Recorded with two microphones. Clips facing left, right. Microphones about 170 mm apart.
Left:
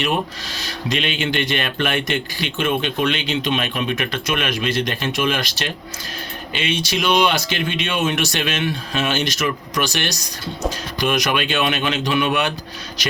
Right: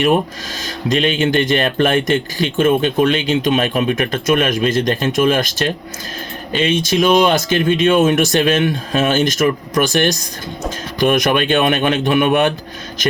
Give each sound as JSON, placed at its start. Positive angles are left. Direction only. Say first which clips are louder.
{"t": 0.6, "sound": "speech", "louder": "right 7 dB", "side_deg": -45}